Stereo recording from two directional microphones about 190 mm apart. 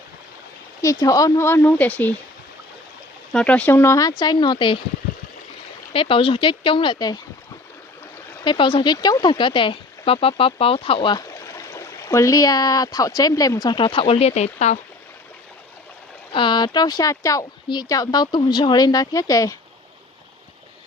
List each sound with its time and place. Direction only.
0.8 s speech: 15° left (ahead or behind)
3.3 s speech: 5° left (ahead or behind); by 4.8 s 25° left (ahead or behind)
5.9 s speech: 30° left (ahead or behind)
8.4 s speech: 25° left (ahead or behind)
16.3 s speech: 25° left (ahead or behind)